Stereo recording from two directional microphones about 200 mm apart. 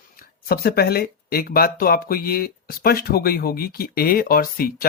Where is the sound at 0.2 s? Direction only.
50° left (ahead or behind).